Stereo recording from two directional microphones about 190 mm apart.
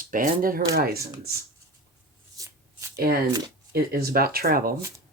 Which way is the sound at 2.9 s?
55° right (ahead or behind).